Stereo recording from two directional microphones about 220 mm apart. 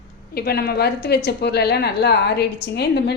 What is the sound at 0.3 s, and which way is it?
A woman's voice, 45° left (ahead or behind).